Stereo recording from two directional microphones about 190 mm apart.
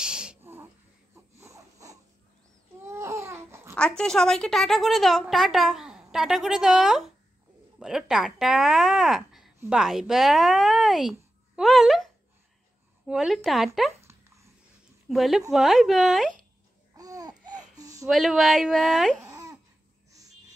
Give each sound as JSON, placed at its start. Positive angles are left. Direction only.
{"t": 0.0, "sound": "a sound", "side_deg": -5}
{"t": 2.9, "sound": "babbling", "side_deg": -15}
{"t": 3.7, "sound": "a woman's voice", "side_deg": 5}
{"t": 15.0, "sound": "a woman's voice", "side_deg": 0}
{"t": 16.9, "sound": "babbling", "side_deg": -20}
{"t": 18.0, "sound": "a woman's voice", "side_deg": 0}
{"t": 19.2, "sound": "babbling", "side_deg": -15}